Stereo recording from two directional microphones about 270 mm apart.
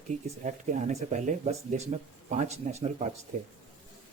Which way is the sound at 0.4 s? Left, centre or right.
Right.